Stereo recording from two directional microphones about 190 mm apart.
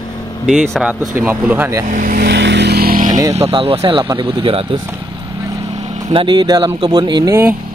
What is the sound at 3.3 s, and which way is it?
Speech, 30° right (ahead or behind).